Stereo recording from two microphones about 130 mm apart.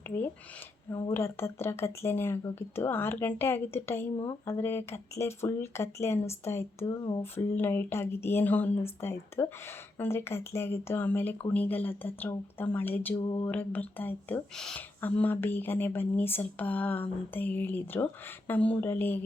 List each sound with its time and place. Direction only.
0.9 s speech: 20° left (ahead or behind)
13.1 s mantra: 35° left (ahead or behind)
13.5 s speech: 15° left (ahead or behind)